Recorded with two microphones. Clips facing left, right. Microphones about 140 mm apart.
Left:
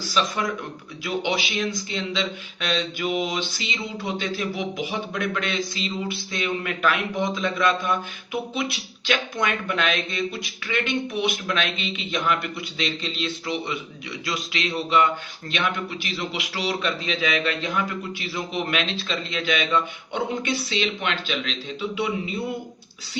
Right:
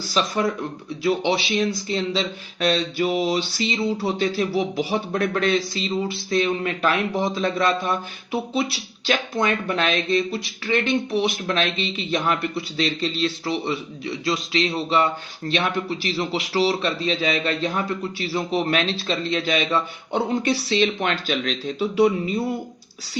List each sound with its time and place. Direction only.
0.1 s speech: 35° right (ahead or behind)